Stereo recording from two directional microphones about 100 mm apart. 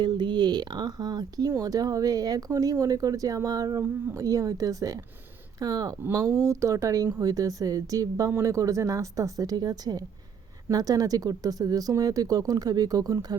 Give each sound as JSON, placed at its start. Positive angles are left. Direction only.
{"t": 0.0, "sound": "speech", "side_deg": -50}